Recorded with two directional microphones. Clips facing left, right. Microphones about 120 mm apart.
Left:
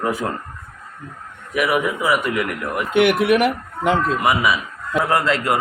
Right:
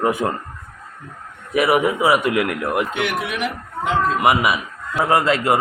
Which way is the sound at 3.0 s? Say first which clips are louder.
Left 8 dB; 60° left (ahead or behind).